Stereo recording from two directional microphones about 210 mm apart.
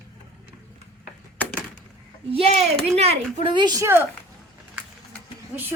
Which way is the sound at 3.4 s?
20° right (ahead or behind).